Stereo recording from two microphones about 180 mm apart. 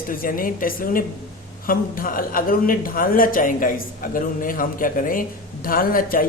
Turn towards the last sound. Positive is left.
turn(degrees=50)  # may be behind; listen again after turning